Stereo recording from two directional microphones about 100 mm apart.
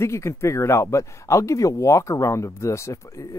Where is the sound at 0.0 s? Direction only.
25° left (ahead or behind).